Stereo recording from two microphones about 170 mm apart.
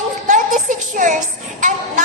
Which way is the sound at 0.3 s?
50° right (ahead or behind).